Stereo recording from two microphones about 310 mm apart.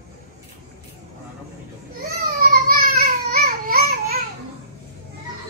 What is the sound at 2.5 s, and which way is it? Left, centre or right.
Babbling, right.